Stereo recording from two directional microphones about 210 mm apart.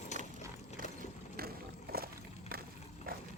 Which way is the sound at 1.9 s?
45° right (ahead or behind).